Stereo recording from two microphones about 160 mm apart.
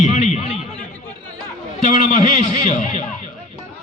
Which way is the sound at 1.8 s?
50° left (ahead or behind).